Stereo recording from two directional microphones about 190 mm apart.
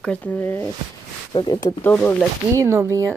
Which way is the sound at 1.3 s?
25° left (ahead or behind).